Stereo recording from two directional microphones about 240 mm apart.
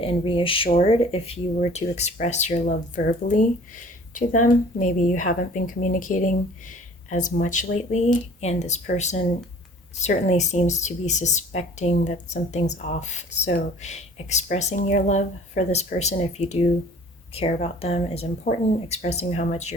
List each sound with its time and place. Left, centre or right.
0.0 s a woman's voice: left